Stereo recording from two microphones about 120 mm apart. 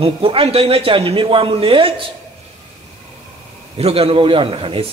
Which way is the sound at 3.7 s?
55° right (ahead or behind).